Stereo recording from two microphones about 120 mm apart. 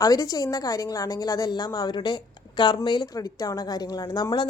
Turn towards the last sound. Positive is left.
turn(degrees=35)  # may be behind; listen again after turning